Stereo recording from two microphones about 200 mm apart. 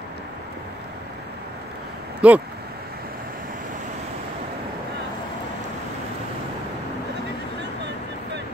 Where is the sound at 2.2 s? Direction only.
5° right (ahead or behind).